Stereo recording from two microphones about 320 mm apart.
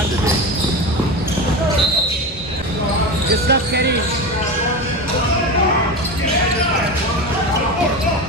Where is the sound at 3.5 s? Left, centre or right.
Right.